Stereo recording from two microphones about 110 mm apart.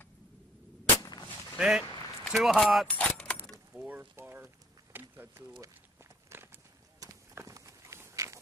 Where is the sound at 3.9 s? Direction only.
15° right (ahead or behind).